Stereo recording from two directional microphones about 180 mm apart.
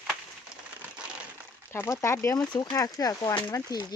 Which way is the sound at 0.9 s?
5° right (ahead or behind).